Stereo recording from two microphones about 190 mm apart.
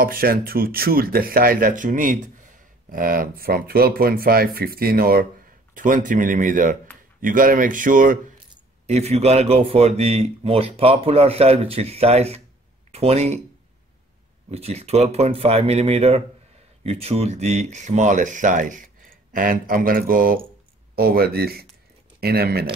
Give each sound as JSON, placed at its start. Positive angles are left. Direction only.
{"t": 0.0, "sound": "speech", "side_deg": -50}
{"t": 14.5, "sound": "speech", "side_deg": -35}